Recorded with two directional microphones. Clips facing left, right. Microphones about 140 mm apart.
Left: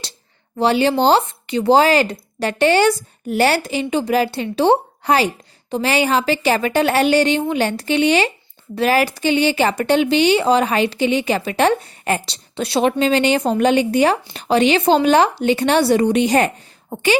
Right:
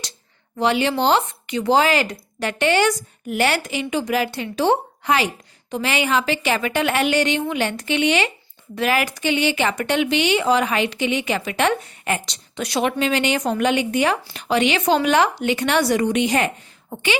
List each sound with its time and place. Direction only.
0.6 s a woman's voice: 35° left (ahead or behind)